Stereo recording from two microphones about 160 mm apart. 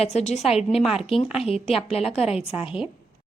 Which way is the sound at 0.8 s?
5° right (ahead or behind).